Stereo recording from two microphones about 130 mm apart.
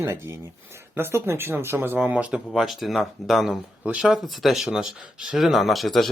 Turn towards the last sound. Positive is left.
turn(degrees=0)  # may be behind; listen again after turning